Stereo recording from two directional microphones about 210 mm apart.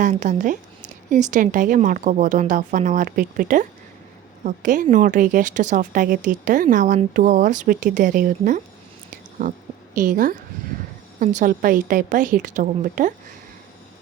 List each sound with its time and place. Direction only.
0.0 s a woman's voice: 35° right (ahead or behind)